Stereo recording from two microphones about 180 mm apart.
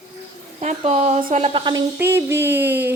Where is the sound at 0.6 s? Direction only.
40° right (ahead or behind).